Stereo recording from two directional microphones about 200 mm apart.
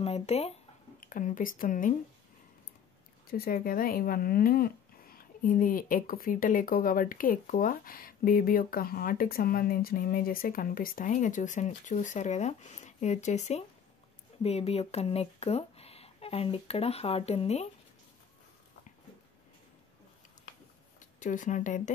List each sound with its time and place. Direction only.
0.0 s speech: 30° left (ahead or behind)
3.3 s speech: 50° left (ahead or behind); by 17.6 s 30° left (ahead or behind)
21.2 s speech: 40° left (ahead or behind)